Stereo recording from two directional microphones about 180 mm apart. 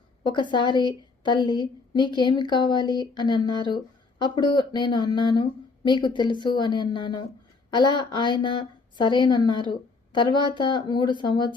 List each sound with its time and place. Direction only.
0.3 s a woman's voice: 25° left (ahead or behind)